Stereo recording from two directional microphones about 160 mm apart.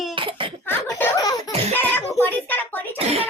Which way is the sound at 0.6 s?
15° left (ahead or behind).